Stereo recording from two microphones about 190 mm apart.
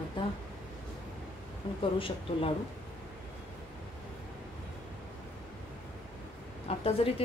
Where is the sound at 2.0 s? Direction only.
30° left (ahead or behind).